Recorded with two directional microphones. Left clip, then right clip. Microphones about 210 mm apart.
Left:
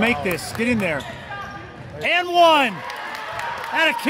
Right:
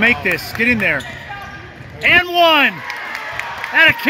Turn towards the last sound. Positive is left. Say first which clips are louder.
# right 8 dB
turn(degrees=0)  # may be behind; listen again after turning